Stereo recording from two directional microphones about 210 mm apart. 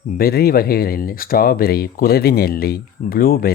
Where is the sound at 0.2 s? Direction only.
45° left (ahead or behind).